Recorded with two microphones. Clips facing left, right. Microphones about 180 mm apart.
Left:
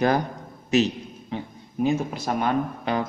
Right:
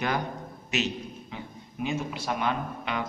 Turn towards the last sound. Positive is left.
turn(degrees=40)  # may be behind; listen again after turning